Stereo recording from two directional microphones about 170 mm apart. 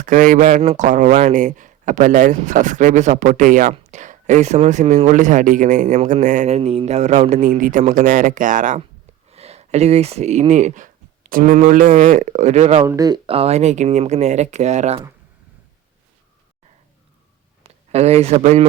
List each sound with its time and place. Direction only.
0.0 s speech: 50° right (ahead or behind)
9.3 s speech: 40° right (ahead or behind)
12.9 s speech: 20° right (ahead or behind)
13.2 s speech: 35° right (ahead or behind)
17.6 s a man's voice: 40° right (ahead or behind)